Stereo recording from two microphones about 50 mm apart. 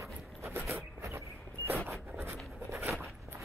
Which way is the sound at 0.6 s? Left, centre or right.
Right.